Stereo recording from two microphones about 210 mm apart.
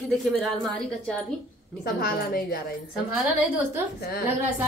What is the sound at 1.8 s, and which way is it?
Speech, 45° left (ahead or behind).